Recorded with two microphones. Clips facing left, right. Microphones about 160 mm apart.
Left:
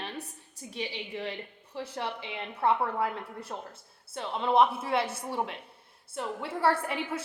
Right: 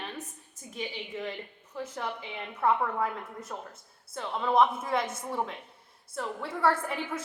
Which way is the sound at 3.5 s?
15° left (ahead or behind).